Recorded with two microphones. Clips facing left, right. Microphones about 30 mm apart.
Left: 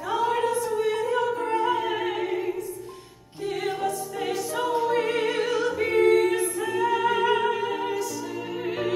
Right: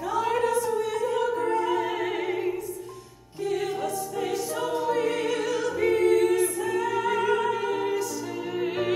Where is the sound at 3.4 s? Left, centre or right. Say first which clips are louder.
Even; left.